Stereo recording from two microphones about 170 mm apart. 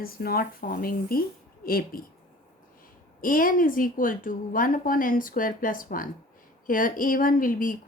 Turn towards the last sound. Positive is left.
turn(degrees=55)  # may be behind; listen again after turning